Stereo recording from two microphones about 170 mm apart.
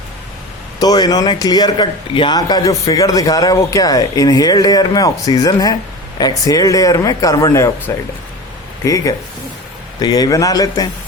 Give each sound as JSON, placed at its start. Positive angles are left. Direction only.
{"t": 0.8, "sound": "speech", "side_deg": 25}